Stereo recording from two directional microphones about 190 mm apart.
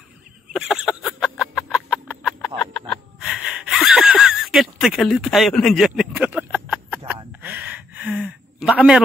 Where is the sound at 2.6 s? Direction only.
5° left (ahead or behind).